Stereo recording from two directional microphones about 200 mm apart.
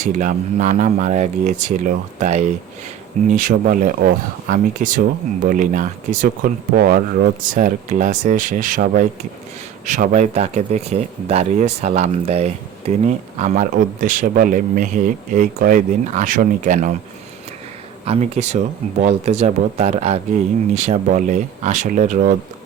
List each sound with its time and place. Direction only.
0.0 s speech: 40° right (ahead or behind)
18.0 s speech: 30° right (ahead or behind)